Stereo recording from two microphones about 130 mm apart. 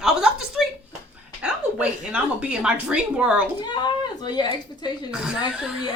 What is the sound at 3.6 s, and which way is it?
Speech, 35° left (ahead or behind).